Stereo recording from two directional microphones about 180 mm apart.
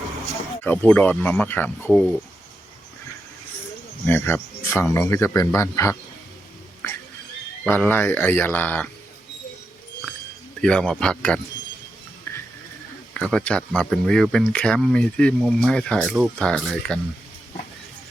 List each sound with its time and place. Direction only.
0.6 s speech: 10° left (ahead or behind)
4.0 s speech: 10° left (ahead or behind)
7.6 s speech: 10° left (ahead or behind)
10.6 s speech: 5° left (ahead or behind)
13.1 s speech: 5° left (ahead or behind)